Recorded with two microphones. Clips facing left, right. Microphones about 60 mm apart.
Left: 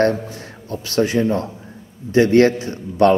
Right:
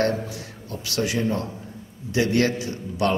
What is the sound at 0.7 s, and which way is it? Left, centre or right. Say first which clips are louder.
A man's voice: left 7 dB; left.